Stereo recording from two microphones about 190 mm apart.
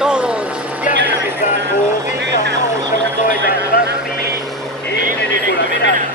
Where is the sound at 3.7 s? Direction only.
50° left (ahead or behind).